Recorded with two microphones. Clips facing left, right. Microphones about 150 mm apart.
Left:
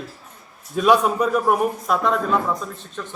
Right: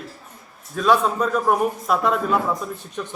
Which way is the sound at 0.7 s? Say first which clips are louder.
Left 2 dB; 15° left (ahead or behind).